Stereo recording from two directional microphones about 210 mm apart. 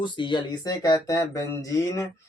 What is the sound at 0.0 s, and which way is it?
Speech, 20° left (ahead or behind).